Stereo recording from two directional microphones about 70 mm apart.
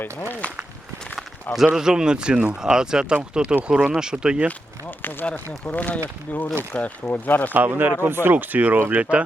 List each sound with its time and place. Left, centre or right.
1.5 s speech: centre
4.9 s a sound: left
5.2 s speech: centre
7.5 s speech: right